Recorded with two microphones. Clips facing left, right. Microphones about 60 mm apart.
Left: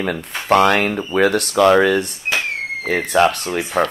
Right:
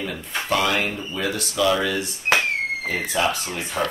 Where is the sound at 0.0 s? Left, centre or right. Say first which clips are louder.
Left 5 dB; left.